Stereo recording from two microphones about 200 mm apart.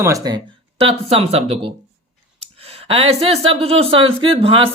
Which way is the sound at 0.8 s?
30° right (ahead or behind).